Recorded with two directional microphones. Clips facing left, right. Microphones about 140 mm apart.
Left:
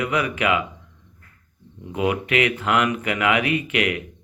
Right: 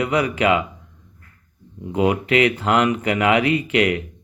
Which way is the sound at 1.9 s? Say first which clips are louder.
Right 4 dB; 30° right (ahead or behind).